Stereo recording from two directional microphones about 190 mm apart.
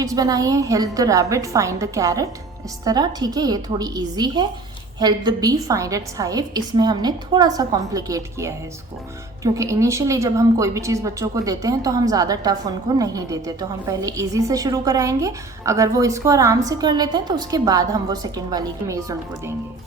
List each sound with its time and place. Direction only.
0.0 s a woman's voice: 20° right (ahead or behind)